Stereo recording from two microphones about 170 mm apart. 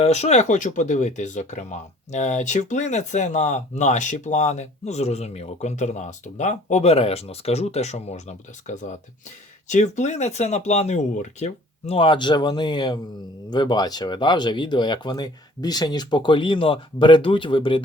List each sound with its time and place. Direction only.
0.0 s speech: 40° left (ahead or behind)